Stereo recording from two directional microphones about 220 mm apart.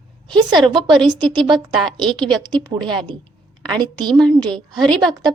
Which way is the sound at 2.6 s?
20° right (ahead or behind).